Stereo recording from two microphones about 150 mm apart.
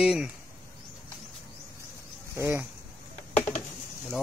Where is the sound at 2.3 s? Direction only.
15° right (ahead or behind).